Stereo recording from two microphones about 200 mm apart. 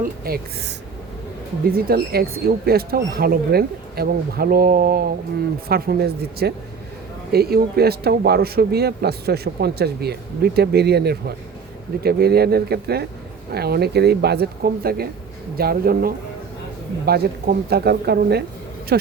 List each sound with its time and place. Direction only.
0.0 s speech: 50° right (ahead or behind)
1.7 s speech: 50° right (ahead or behind)